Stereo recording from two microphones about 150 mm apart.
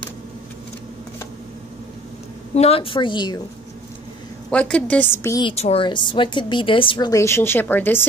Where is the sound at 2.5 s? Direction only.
45° left (ahead or behind).